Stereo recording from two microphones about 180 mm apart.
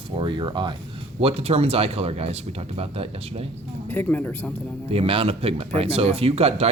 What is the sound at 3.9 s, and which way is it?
Speech, 10° left (ahead or behind).